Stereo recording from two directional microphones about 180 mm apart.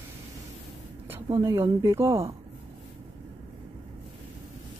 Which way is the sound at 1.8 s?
15° right (ahead or behind).